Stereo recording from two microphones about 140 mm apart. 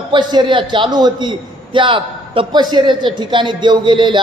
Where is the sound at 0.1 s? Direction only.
30° right (ahead or behind).